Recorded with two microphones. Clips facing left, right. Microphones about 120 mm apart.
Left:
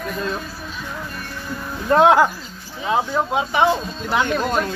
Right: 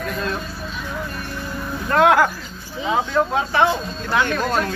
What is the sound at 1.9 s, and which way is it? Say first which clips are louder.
Speech: left 2 dB; 25° left (ahead or behind).